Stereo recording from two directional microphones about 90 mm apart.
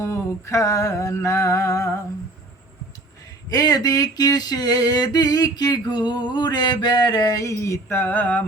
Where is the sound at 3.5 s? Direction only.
45° left (ahead or behind).